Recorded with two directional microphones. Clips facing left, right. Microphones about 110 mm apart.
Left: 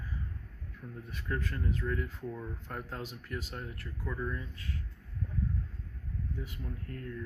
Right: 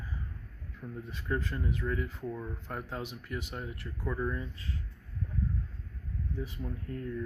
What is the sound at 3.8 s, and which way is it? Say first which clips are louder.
Speech: right 4 dB; 30° right (ahead or behind).